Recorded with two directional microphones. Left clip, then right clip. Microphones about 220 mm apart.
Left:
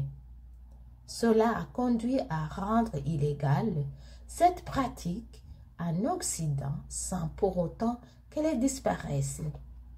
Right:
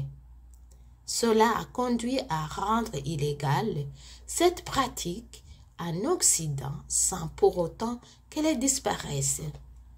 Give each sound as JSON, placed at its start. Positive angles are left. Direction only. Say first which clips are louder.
{"t": 1.0, "sound": "a woman's voice", "louder": "right 3 dB", "side_deg": -30}